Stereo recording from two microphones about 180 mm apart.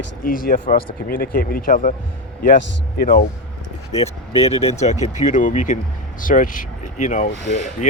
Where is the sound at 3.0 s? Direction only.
50° left (ahead or behind).